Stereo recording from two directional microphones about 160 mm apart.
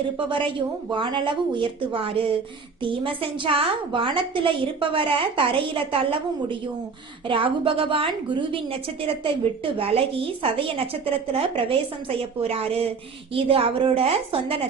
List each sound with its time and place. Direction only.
0.3 s a woman's voice: 30° right (ahead or behind)